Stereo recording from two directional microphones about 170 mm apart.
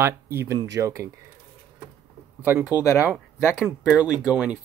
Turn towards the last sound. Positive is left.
turn(degrees=-5)  # may be behind; listen again after turning